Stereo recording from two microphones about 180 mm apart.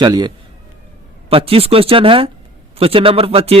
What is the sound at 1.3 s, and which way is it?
Speech, 30° right (ahead or behind).